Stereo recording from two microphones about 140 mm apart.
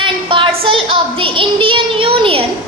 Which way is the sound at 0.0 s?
40° right (ahead or behind).